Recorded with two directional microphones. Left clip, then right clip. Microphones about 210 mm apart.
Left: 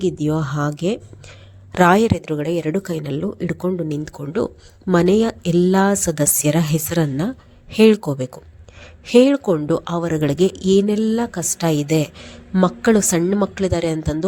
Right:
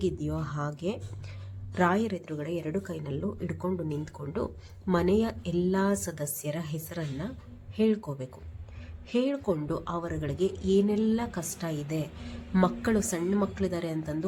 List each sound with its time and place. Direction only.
0.0 s speech: 35° left (ahead or behind)